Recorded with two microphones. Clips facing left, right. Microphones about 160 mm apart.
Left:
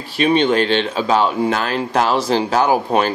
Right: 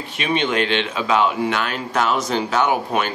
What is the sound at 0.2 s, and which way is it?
Speech, 35° left (ahead or behind).